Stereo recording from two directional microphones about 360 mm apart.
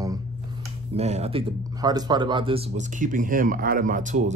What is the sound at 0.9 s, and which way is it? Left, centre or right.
Speech, centre.